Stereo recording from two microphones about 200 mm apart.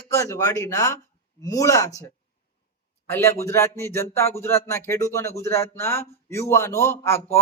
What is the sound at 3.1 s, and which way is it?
A man's voice, 10° left (ahead or behind).